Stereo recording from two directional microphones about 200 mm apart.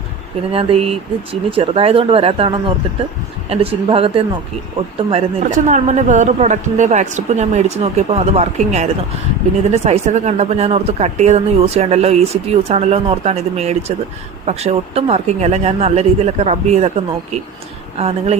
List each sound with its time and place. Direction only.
0.5 s speech: 30° right (ahead or behind)
5.5 s speech: 40° right (ahead or behind)
17.9 s speech: 30° right (ahead or behind)